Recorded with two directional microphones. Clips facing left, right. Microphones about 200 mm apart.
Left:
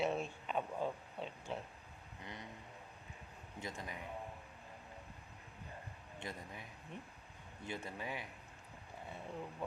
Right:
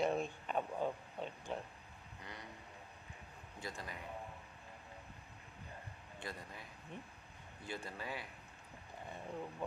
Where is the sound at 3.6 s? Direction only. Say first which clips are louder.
Left 1 dB; 20° left (ahead or behind).